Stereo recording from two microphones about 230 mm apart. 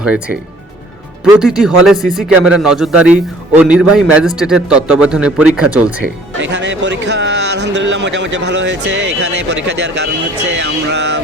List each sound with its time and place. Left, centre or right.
0.0 s a man's voice: centre
6.4 s speech: right